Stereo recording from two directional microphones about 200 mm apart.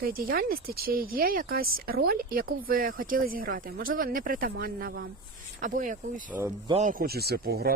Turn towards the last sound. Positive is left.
turn(degrees=-50)  # may be behind; listen again after turning